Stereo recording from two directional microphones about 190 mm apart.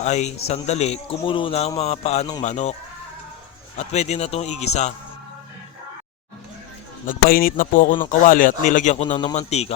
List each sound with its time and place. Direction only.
0.0 s a man's voice: 35° left (ahead or behind)
3.8 s a man's voice: 35° left (ahead or behind)
7.0 s a man's voice: 50° left (ahead or behind)